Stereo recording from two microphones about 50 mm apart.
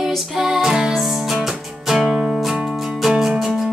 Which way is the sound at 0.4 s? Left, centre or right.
Centre.